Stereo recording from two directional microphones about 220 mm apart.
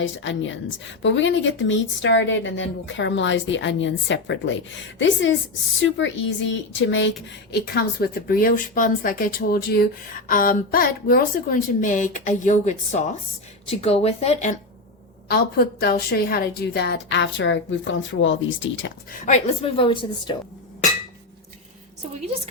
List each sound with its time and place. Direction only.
0.0 s a woman's voice: 60° left (ahead or behind); by 14.5 s 30° left (ahead or behind)
15.3 s speech: 45° left (ahead or behind)
19.1 s a woman's voice: 35° left (ahead or behind)